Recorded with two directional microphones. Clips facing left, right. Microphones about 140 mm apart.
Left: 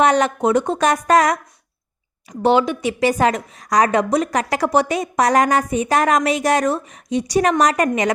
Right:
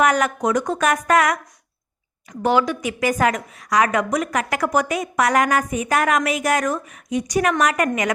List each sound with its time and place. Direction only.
0.0 s a woman's voice: 30° left (ahead or behind)
2.4 s a woman's voice: 25° left (ahead or behind)